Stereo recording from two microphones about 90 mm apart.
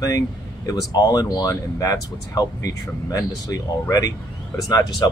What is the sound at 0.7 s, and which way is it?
Speech, 45° left (ahead or behind).